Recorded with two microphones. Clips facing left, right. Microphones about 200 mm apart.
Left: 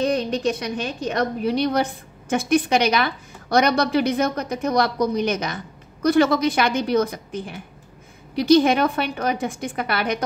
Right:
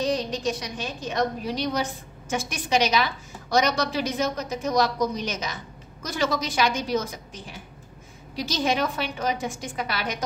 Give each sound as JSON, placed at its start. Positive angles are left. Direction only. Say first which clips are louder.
{"t": 0.0, "sound": "a woman's voice", "louder": "left 4 dB", "side_deg": 60}